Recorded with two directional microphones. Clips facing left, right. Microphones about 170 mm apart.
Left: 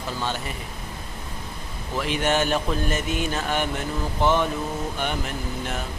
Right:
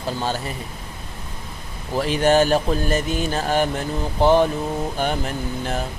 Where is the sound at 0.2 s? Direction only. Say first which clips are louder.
Right 2 dB; 35° right (ahead or behind).